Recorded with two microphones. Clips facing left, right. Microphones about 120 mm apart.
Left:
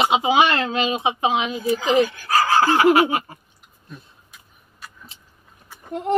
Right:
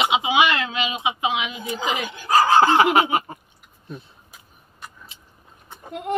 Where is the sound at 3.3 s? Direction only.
25° right (ahead or behind).